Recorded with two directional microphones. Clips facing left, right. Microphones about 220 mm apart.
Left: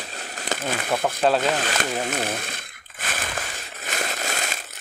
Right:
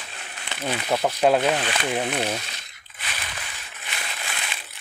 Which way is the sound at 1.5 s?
45° left (ahead or behind).